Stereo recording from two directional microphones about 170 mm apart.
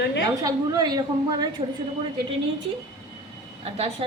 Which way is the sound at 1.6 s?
35° right (ahead or behind).